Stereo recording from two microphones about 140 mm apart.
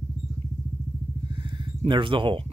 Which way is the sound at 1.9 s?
35° right (ahead or behind).